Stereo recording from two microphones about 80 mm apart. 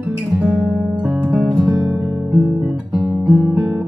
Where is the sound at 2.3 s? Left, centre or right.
Centre.